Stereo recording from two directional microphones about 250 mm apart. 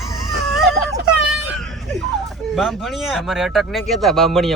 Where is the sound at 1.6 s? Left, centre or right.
Centre.